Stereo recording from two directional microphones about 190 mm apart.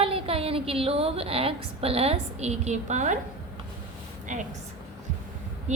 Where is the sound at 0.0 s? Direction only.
30° right (ahead or behind).